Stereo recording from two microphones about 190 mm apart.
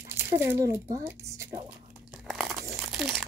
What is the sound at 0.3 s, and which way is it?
Speech, 15° right (ahead or behind).